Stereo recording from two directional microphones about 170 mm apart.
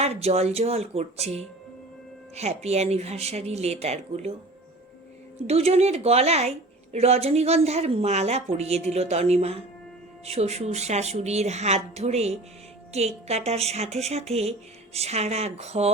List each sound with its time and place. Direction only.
0.0 s speech: 40° right (ahead or behind)
5.5 s speech: 40° right (ahead or behind)